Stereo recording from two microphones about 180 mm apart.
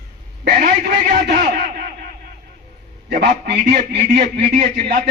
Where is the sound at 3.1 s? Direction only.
70° right (ahead or behind).